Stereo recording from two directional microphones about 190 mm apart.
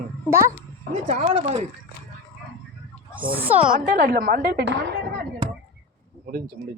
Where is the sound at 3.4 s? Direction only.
10° right (ahead or behind).